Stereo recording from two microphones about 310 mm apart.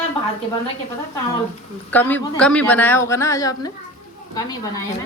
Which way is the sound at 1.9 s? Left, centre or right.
Centre.